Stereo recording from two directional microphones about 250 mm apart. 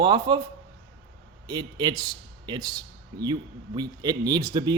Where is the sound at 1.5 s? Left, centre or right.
Centre.